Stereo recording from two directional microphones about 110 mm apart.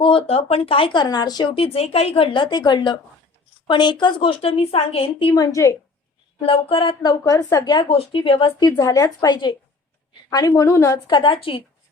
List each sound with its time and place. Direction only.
0.0 s a woman's voice: 55° left (ahead or behind)
1.0 s a woman's voice: 35° left (ahead or behind)
1.5 s a woman's voice: 60° left (ahead or behind)
4.4 s a woman's voice: 65° left (ahead or behind)
5.3 s a woman's voice: 35° left (ahead or behind)
6.4 s a woman's voice: 55° left (ahead or behind)
7.0 s a woman's voice: 40° left (ahead or behind)
7.9 s a woman's voice: 55° left (ahead or behind)
8.8 s a woman's voice: 35° left (ahead or behind)
10.2 s a woman's voice: 35° left (ahead or behind)
11.1 s a woman's voice: 50° left (ahead or behind)